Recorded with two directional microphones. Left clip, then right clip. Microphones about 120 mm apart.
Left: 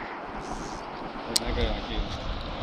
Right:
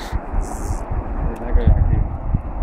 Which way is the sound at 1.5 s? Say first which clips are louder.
Right 3 dB; 30° right (ahead or behind).